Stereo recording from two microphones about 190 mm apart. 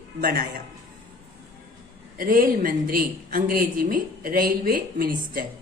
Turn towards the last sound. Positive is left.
turn(degrees=-50)  # may be behind; listen again after turning